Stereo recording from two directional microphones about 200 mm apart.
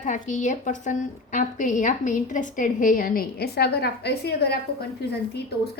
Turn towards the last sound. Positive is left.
turn(degrees=55)  # may be behind; listen again after turning